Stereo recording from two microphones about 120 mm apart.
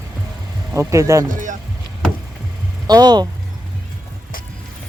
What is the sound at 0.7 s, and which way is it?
Speech, 25° right (ahead or behind).